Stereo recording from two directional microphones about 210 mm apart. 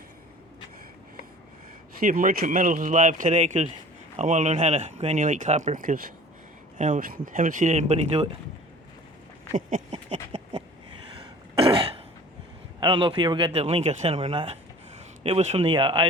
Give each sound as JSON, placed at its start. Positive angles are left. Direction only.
{"t": 2.0, "sound": "speech", "side_deg": -40}
{"t": 9.5, "sound": "a sound", "side_deg": -35}
{"t": 11.5, "sound": "throat clearing", "side_deg": -25}
{"t": 12.8, "sound": "speech", "side_deg": -25}